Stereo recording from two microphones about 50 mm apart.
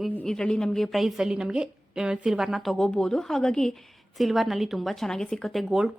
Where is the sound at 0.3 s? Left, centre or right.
Centre.